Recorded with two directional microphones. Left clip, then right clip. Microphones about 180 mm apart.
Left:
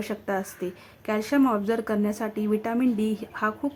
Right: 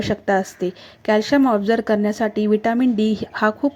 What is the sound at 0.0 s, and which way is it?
Speech, 25° right (ahead or behind).